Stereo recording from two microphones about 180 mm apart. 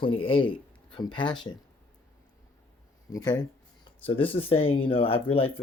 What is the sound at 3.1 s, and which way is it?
Speech, 20° left (ahead or behind).